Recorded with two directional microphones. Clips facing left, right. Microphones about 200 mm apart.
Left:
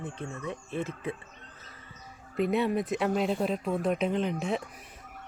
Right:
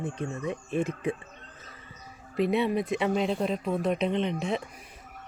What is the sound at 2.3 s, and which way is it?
Speech, centre (ahead or behind).